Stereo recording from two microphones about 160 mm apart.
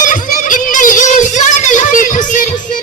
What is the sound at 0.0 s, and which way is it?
Music, 55° left (ahead or behind).